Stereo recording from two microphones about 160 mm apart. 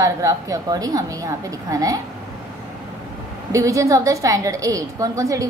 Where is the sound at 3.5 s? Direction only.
20° right (ahead or behind).